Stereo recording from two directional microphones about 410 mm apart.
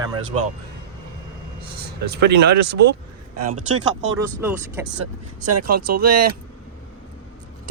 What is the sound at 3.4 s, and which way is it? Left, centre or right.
Speech, right.